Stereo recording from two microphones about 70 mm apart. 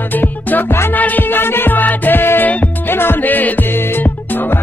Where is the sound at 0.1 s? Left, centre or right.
Left.